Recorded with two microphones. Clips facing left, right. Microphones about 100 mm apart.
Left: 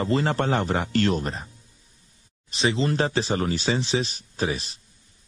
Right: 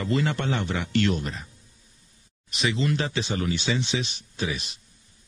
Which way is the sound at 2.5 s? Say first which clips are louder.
Left 2 dB; 30° left (ahead or behind).